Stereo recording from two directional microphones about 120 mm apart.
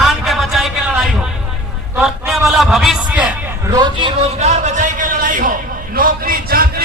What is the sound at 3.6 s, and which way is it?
Speech, 35° right (ahead or behind).